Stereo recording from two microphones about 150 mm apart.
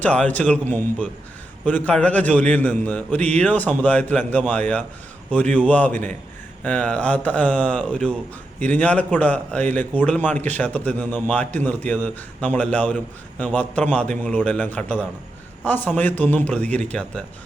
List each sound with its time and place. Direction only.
0.0 s speech: 10° left (ahead or behind)